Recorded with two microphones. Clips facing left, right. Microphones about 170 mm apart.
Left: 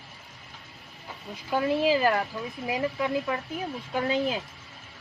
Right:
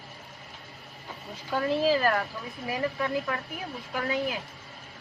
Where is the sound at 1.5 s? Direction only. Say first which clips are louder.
Left 1 dB; 15° left (ahead or behind).